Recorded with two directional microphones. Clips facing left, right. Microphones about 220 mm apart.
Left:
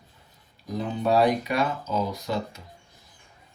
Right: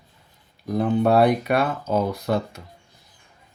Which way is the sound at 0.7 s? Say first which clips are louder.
Right 5 dB; 55° right (ahead or behind).